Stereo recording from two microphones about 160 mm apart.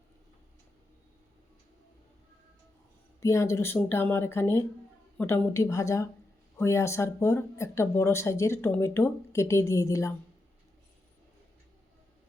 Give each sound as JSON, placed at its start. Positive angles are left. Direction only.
{"t": 3.2, "sound": "speech", "side_deg": 20}